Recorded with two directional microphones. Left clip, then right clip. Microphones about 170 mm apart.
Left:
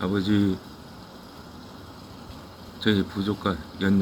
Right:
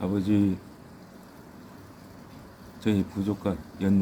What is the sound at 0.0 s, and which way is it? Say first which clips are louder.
Speech: left 2 dB; 15° right (ahead or behind).